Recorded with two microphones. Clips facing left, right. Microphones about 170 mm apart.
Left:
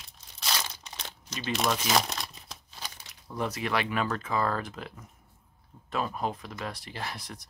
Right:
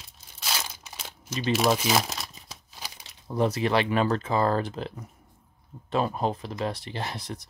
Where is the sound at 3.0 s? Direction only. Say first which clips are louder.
Right 8 dB; 30° right (ahead or behind).